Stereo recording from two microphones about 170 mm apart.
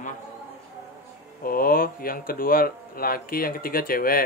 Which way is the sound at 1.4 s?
60° left (ahead or behind).